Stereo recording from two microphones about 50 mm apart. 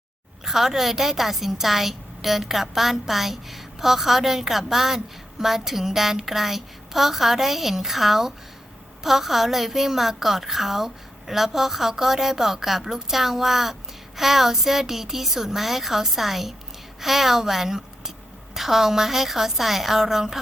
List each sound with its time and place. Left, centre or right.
0.4 s a woman's voice: centre